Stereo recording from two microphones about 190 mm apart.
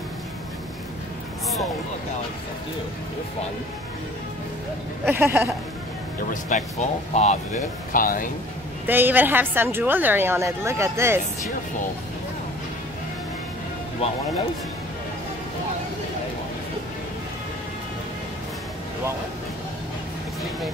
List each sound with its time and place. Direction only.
5.0 s a woman's voice: 10° right (ahead or behind)
6.5 s speech: 40° left (ahead or behind)
8.8 s a woman's voice: 10° right (ahead or behind)